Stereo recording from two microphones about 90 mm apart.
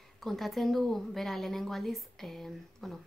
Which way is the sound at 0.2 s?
Centre (ahead or behind).